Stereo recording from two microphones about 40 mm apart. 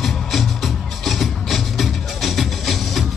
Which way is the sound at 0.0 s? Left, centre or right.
Centre.